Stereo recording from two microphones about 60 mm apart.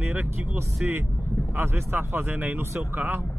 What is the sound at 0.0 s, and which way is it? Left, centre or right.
Vehicle, right.